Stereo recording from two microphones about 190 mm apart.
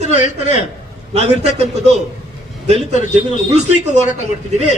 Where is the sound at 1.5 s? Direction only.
35° right (ahead or behind).